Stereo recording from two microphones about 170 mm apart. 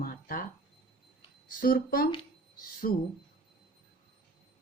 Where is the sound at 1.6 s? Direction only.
60° left (ahead or behind).